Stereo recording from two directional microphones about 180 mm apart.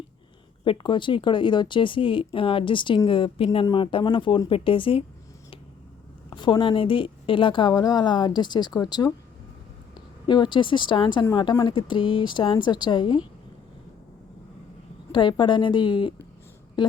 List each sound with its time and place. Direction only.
0.6 s speech: 30° left (ahead or behind)
6.3 s speech: 25° left (ahead or behind)
10.2 s speech: 25° left (ahead or behind)
15.1 s speech: 25° left (ahead or behind)